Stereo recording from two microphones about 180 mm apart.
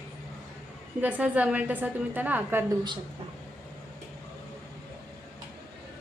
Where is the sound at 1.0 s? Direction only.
10° right (ahead or behind).